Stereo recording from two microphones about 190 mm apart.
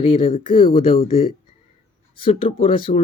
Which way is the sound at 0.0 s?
30° left (ahead or behind).